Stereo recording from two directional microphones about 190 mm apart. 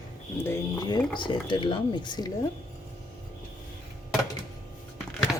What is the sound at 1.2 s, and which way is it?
Speech, 25° left (ahead or behind).